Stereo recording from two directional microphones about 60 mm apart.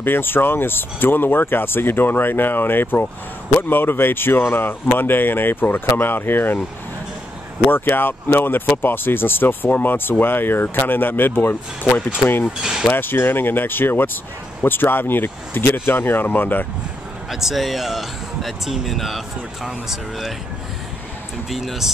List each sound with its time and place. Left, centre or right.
0.0 s speech: left
7.7 s speech: left
12.8 s speech: left
17.3 s speech: centre
21.5 s speech: centre